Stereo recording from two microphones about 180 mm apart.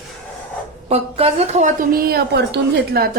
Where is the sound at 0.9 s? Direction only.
35° right (ahead or behind).